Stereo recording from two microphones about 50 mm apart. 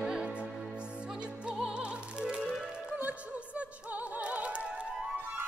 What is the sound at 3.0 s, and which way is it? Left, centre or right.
Opera, right.